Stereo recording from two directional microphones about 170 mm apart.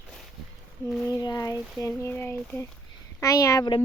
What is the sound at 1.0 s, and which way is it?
Speech, 25° left (ahead or behind).